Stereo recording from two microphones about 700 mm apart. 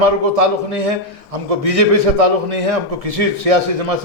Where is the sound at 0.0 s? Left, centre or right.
Right.